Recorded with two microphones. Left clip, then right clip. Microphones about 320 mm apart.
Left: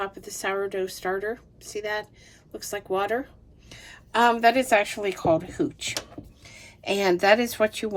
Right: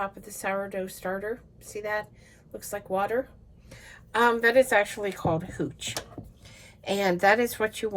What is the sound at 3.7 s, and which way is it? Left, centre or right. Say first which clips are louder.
A woman's voice: left 3 dB; centre.